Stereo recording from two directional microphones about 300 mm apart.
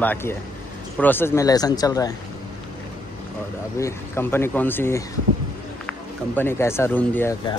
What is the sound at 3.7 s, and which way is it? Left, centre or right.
Speech, centre.